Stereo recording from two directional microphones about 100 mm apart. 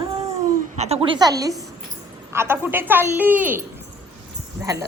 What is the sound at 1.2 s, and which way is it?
Speech, 35° right (ahead or behind).